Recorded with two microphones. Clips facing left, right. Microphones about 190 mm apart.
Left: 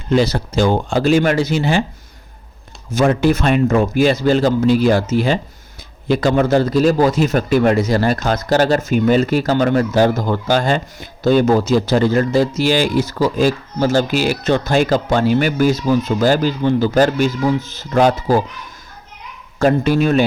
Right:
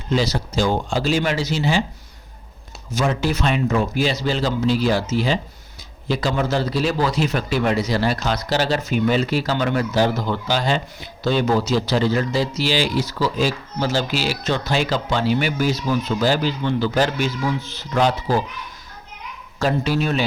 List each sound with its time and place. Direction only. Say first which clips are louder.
0.1 s speech: left 6 dB; 55° left (ahead or behind)
2.9 s a man's voice: left 7 dB; 55° left (ahead or behind)
19.5 s a man's voice: left 6 dB; 50° left (ahead or behind)